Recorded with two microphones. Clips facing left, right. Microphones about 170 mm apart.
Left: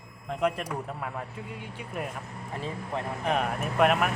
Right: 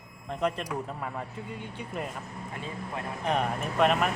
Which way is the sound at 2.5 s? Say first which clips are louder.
Left 4 dB; 30° left (ahead or behind).